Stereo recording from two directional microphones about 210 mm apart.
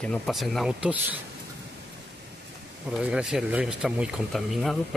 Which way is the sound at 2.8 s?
5° right (ahead or behind).